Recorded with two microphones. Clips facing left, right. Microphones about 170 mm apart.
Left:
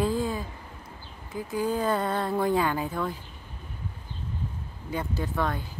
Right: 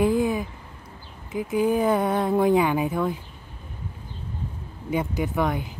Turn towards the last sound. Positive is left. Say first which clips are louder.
# right 5 dB
turn(degrees=-15)  # may be behind; listen again after turning